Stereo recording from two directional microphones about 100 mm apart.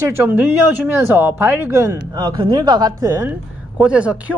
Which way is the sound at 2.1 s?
50° right (ahead or behind).